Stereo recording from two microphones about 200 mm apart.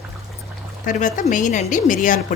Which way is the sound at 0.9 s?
40° left (ahead or behind).